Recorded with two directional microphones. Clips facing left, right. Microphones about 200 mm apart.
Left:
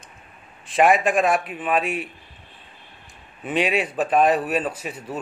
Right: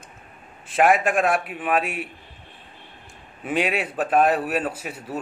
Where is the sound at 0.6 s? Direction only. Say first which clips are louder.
Left 1 dB; 5° right (ahead or behind).